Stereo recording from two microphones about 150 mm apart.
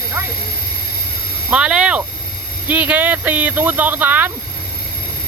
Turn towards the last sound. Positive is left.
turn(degrees=-10)  # may be behind; listen again after turning